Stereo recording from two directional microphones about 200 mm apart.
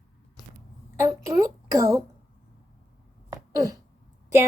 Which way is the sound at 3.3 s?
15° right (ahead or behind).